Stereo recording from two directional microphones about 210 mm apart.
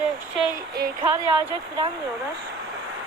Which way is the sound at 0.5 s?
45° right (ahead or behind).